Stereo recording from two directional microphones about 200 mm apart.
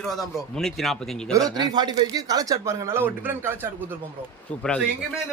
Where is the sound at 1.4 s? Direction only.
20° right (ahead or behind).